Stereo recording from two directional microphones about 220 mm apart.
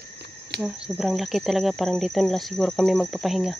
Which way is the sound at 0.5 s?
50° right (ahead or behind).